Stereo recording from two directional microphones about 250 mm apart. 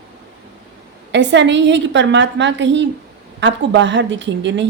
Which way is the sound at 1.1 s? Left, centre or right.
Right.